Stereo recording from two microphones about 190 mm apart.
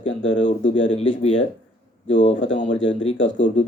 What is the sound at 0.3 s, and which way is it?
Speech, 40° left (ahead or behind).